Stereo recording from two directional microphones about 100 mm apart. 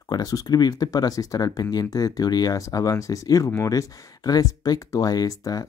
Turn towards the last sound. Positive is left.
turn(degrees=35)  # may be behind; listen again after turning